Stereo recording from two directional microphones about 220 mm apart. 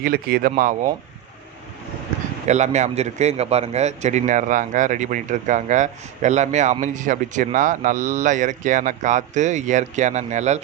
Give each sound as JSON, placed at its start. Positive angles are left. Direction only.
{"t": 0.0, "sound": "speech", "side_deg": -40}
{"t": 2.5, "sound": "speech", "side_deg": -30}